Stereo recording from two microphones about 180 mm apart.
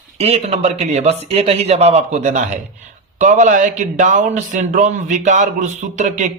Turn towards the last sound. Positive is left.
turn(degrees=-40)  # may be behind; listen again after turning